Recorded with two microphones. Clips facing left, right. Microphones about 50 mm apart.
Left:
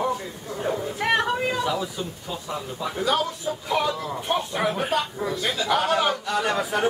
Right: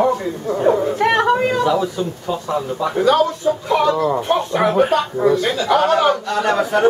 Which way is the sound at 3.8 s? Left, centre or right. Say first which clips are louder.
Right 11 dB; right.